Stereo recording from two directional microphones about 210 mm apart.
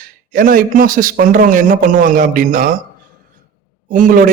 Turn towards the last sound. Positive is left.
turn(degrees=-40)  # may be behind; listen again after turning